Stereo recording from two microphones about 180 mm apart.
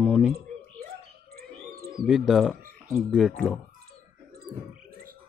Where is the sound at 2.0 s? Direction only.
Centre (ahead or behind).